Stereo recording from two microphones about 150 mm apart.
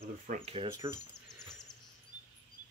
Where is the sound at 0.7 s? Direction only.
25° right (ahead or behind).